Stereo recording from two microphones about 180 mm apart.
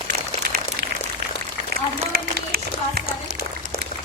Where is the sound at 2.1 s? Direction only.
55° right (ahead or behind).